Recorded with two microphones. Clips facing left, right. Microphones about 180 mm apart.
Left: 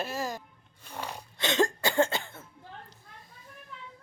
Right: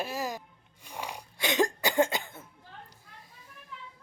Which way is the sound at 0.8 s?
15° right (ahead or behind).